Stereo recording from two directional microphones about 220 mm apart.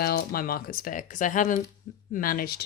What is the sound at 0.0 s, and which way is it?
Speech, 45° left (ahead or behind).